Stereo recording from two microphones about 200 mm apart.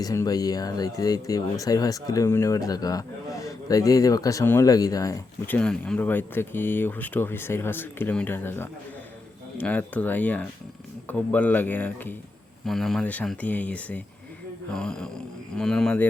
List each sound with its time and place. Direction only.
0.0 s speech: 15° left (ahead or behind)